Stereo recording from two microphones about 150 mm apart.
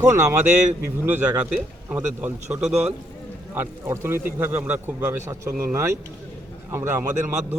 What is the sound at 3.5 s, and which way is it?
A man's voice, 15° right (ahead or behind).